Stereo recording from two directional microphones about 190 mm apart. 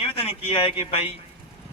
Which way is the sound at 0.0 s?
30° left (ahead or behind).